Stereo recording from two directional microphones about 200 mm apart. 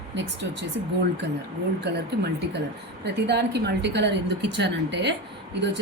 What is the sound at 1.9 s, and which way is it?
A woman's voice, 55° right (ahead or behind).